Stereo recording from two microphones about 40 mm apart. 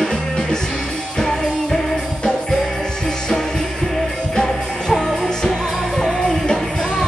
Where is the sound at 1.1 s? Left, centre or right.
Centre.